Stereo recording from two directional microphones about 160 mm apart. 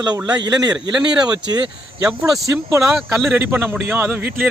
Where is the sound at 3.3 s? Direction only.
15° right (ahead or behind).